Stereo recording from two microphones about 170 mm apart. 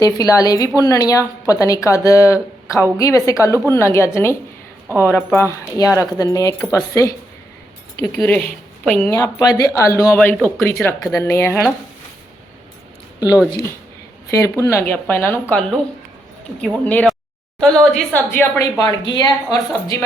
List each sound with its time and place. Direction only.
0.0 s a woman's voice: 20° left (ahead or behind); by 9.0 s 5° left (ahead or behind)
9.0 s speech: 15° left (ahead or behind)
10.2 s speech: 5° left (ahead or behind)
13.1 s speech: 20° left (ahead or behind)
18.8 s speech: 25° left (ahead or behind)